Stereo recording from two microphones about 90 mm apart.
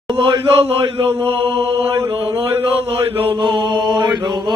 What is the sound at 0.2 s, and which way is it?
Chant, 75° right (ahead or behind).